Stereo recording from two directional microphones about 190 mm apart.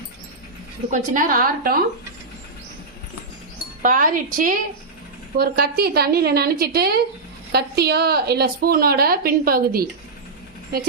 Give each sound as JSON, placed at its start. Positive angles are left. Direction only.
{"t": 0.9, "sound": "a woman's voice", "side_deg": -40}
{"t": 3.8, "sound": "a woman's voice", "side_deg": -45}